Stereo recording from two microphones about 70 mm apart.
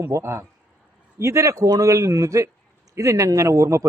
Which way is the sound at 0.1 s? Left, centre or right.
Right.